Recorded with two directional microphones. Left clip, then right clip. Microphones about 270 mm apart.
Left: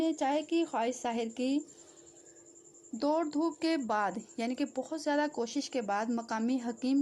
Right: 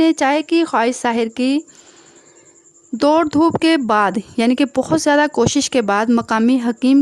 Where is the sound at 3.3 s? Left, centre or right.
Right.